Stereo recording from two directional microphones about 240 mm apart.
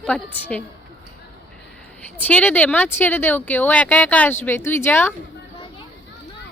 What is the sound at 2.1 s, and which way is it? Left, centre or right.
Speech, centre.